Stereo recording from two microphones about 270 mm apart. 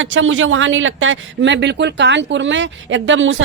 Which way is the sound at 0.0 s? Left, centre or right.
Right.